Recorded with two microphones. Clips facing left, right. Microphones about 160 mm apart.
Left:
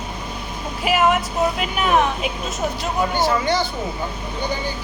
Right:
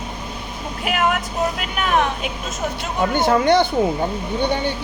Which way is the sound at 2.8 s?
55° right (ahead or behind).